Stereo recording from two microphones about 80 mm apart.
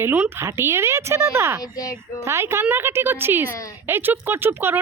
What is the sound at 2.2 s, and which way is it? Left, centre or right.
Speech, right.